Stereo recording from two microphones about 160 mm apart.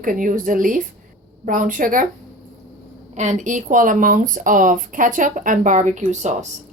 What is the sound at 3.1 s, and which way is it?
Speech, 45° right (ahead or behind).